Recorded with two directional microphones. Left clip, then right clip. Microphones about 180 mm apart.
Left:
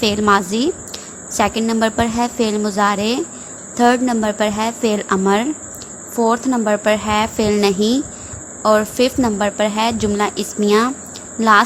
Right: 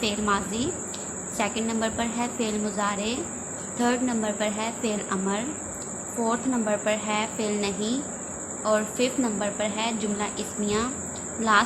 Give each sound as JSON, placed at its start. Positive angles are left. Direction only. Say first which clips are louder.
{"t": 0.0, "sound": "a woman's voice", "louder": "left 11 dB", "side_deg": 55}